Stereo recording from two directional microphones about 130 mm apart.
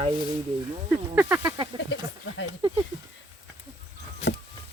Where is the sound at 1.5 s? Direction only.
30° right (ahead or behind).